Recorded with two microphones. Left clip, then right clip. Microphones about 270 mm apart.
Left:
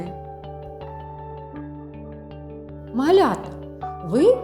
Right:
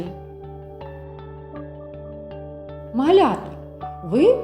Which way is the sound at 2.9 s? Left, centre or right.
Centre.